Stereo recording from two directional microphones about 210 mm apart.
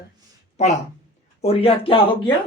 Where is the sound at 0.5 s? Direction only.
35° left (ahead or behind).